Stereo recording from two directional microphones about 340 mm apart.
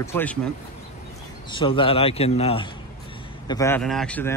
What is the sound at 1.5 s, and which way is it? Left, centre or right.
A man's voice, centre.